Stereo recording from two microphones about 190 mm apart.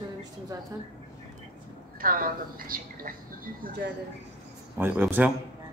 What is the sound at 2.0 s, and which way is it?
Speech, 50° right (ahead or behind).